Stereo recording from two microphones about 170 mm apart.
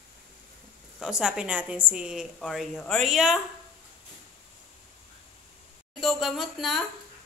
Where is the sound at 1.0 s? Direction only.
5° right (ahead or behind).